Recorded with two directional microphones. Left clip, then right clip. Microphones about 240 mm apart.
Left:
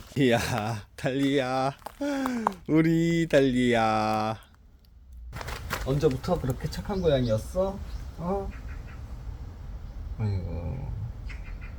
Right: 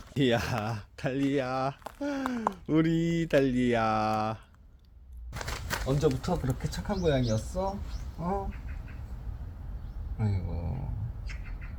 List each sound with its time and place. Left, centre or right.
0.1 s speech: centre
5.5 s speech: centre